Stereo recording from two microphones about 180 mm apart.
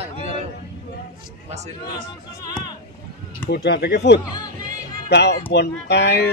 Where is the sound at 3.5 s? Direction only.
65° left (ahead or behind).